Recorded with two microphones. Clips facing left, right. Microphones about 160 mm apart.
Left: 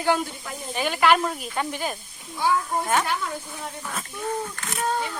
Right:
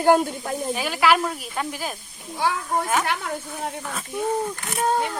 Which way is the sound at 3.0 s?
60° right (ahead or behind).